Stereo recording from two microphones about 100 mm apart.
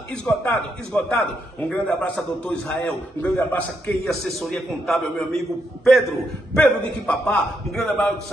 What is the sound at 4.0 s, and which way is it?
A man's voice, 5° left (ahead or behind).